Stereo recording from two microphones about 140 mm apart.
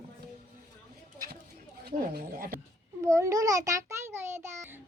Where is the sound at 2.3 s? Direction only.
90° right.